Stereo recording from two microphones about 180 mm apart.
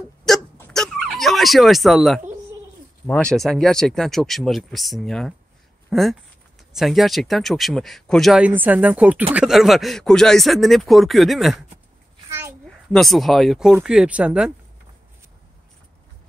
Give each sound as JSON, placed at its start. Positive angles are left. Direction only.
{"t": 0.2, "sound": "hiccup", "side_deg": 5}
{"t": 3.1, "sound": "speech", "side_deg": 5}
{"t": 12.3, "sound": "a sound", "side_deg": -15}
{"t": 12.6, "sound": "speech", "side_deg": 0}